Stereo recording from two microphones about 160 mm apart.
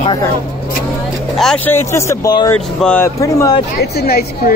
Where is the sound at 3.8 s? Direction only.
80° left.